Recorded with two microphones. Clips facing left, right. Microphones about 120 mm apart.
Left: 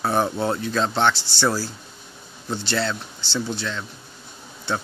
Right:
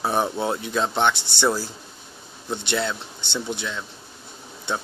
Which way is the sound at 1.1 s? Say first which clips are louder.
Even; 60° right (ahead or behind).